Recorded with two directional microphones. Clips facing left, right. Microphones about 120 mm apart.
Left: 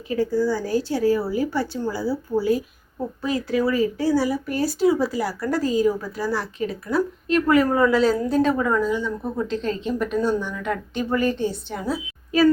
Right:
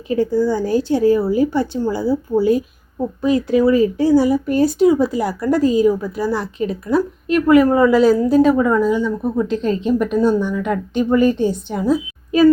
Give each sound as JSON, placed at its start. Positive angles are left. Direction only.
{"t": 0.1, "sound": "a woman's voice", "side_deg": -20}